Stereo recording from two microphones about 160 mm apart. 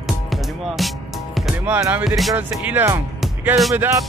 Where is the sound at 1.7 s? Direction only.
15° right (ahead or behind).